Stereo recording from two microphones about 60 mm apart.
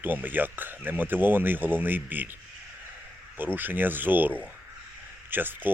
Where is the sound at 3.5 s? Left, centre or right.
Right.